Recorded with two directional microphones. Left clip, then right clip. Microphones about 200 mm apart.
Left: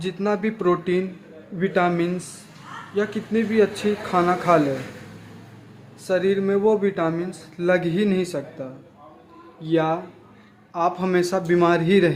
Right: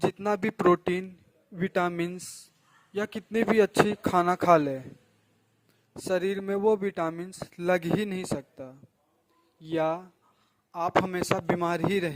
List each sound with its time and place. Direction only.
0.0 s speech: 50° right (ahead or behind)
6.0 s speech: 55° right (ahead or behind)